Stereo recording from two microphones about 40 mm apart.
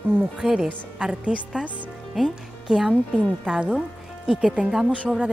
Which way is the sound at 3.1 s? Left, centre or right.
Centre.